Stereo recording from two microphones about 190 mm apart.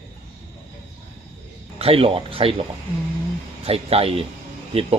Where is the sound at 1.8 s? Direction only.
30° right (ahead or behind).